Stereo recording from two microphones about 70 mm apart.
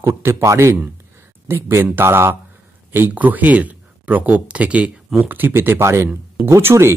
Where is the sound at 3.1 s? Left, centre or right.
Right.